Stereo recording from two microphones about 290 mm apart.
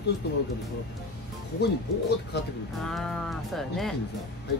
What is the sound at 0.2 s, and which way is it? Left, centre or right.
Speech, left.